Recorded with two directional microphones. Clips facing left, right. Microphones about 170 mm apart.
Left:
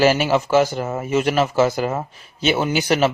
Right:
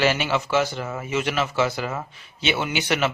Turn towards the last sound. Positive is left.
turn(degrees=35)  # may be behind; listen again after turning